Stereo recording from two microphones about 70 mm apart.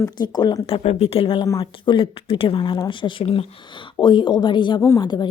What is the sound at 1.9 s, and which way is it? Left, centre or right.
Speech, left.